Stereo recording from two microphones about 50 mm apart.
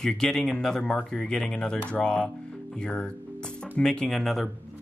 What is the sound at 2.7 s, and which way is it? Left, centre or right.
Music, left.